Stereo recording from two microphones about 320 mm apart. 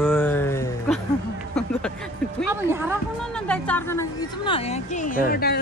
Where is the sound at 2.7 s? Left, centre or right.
Centre.